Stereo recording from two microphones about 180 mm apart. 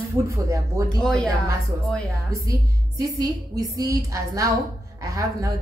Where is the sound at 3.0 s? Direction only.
20° right (ahead or behind).